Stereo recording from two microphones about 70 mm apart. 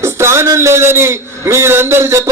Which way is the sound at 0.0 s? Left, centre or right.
Right.